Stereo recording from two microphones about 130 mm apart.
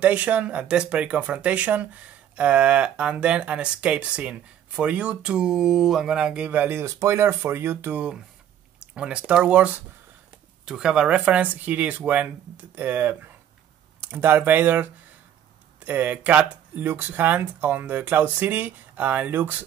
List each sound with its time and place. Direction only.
0.0 s speech: 10° right (ahead or behind)